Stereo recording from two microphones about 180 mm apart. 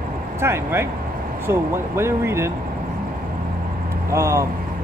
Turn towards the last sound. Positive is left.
turn(degrees=-15)  # may be behind; listen again after turning